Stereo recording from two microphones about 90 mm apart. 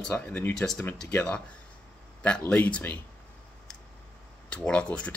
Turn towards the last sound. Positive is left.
turn(degrees=15)  # may be behind; listen again after turning